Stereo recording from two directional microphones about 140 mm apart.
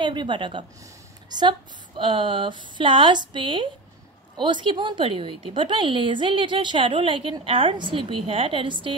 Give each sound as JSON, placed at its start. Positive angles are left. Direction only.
{"t": 0.0, "sound": "a woman's voice", "side_deg": -35}